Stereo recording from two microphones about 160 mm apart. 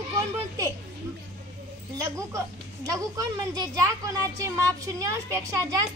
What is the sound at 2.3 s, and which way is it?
A woman's voice, 20° right (ahead or behind).